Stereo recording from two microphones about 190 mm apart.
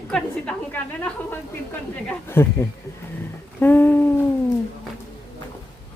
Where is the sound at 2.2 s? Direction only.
10° left (ahead or behind).